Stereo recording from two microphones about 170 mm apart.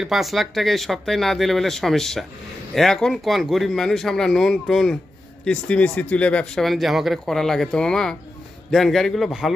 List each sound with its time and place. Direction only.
0.0 s speech: centre (ahead or behind)